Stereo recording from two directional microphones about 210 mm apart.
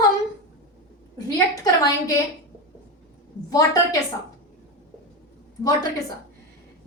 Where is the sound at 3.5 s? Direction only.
15° left (ahead or behind).